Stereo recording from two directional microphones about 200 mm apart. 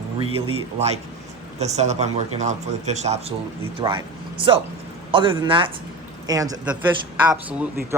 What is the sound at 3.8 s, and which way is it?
Speech, 20° right (ahead or behind).